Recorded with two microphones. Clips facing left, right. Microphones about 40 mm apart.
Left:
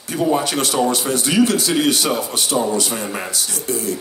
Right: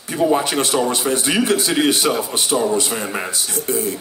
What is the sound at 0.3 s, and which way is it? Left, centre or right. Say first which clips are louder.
Speech: left 1 dB; right.